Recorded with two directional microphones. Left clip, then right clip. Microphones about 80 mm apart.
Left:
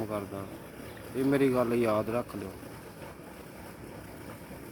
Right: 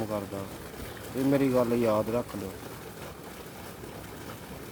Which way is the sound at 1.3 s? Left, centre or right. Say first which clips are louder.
Right 1 dB; centre.